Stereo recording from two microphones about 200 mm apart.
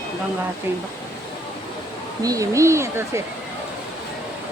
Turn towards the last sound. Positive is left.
turn(degrees=-15)  # may be behind; listen again after turning